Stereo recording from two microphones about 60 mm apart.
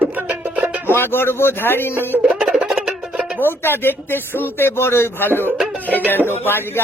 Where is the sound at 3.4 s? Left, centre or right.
Left.